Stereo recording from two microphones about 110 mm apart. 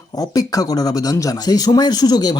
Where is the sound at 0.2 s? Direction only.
35° left (ahead or behind).